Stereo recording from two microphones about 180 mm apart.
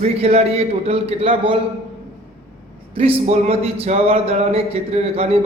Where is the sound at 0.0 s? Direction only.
35° right (ahead or behind).